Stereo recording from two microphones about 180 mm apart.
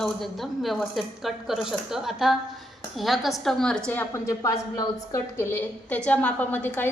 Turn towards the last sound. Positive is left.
turn(degrees=10)  # may be behind; listen again after turning